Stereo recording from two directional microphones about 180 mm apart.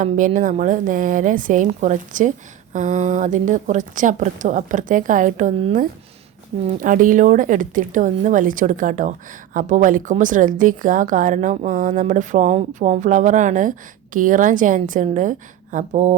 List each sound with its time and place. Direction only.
0.0 s speech: 45° right (ahead or behind)